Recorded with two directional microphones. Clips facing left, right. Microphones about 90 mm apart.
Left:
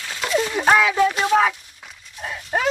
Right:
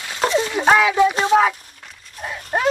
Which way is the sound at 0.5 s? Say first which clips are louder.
Right 1 dB; 5° right (ahead or behind).